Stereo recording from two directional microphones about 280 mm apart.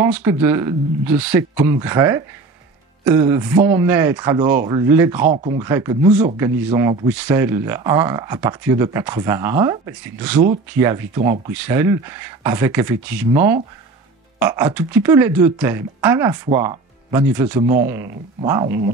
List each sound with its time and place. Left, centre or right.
0.0 s speech: centre
5.2 s speech: right
5.6 s speech: centre